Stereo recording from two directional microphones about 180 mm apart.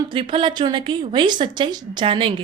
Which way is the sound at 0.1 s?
30° right (ahead or behind).